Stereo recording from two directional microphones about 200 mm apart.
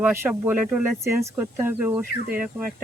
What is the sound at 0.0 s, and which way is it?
Speech, 10° right (ahead or behind).